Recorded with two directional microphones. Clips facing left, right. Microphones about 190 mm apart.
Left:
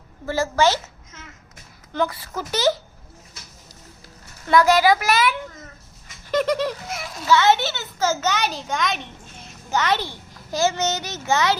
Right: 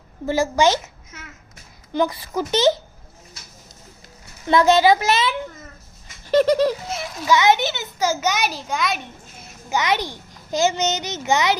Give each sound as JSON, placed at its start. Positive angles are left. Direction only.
{"t": 0.3, "sound": "a child's voice", "side_deg": -15}
{"t": 4.4, "sound": "a child's voice", "side_deg": -25}
{"t": 6.3, "sound": "a sound", "side_deg": -35}
{"t": 7.3, "sound": "a child's voice", "side_deg": -15}